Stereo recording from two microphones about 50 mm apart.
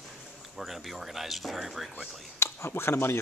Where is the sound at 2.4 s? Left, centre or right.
Left.